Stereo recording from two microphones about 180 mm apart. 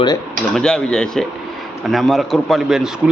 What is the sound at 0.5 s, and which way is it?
A man's voice, 5° left (ahead or behind).